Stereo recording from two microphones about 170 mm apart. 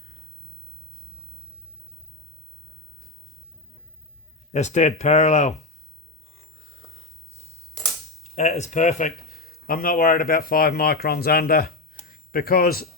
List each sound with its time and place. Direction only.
4.5 s speech: 45° left (ahead or behind)
8.2 s speech: 40° left (ahead or behind)
9.3 s speech: 60° left (ahead or behind)